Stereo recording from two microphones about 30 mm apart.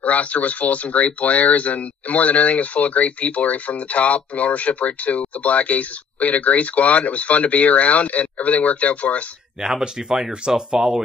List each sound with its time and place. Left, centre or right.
0.0 s speech: left
9.6 s speech: right